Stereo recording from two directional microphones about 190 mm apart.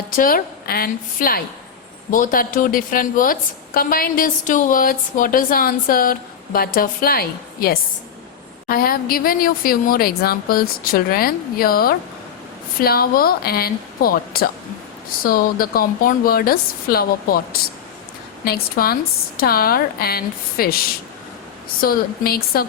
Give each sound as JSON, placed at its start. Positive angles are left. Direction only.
{"t": 0.2, "sound": "a woman's voice", "side_deg": 50}